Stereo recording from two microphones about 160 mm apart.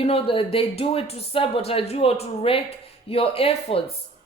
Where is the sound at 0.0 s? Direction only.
35° left (ahead or behind).